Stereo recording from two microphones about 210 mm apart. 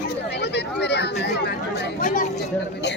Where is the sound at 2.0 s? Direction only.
40° left (ahead or behind).